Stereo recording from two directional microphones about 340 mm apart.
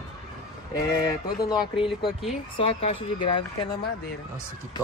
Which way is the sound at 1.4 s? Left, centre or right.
Centre.